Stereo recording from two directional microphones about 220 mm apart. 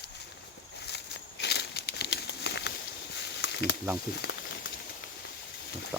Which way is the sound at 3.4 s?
50° left (ahead or behind).